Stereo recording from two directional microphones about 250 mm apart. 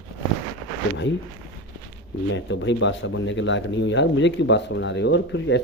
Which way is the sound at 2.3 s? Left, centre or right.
Left.